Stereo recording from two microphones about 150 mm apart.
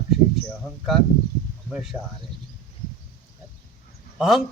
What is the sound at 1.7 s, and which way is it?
Speech, centre (ahead or behind).